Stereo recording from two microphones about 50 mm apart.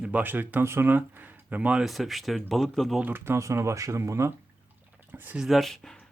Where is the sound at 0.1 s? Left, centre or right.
Right.